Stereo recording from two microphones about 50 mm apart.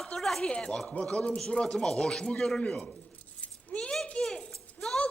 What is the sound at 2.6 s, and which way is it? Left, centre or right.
Speech, left.